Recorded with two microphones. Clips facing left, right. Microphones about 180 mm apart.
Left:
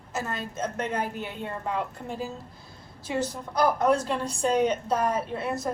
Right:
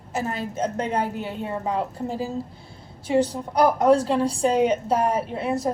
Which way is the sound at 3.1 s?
35° right (ahead or behind).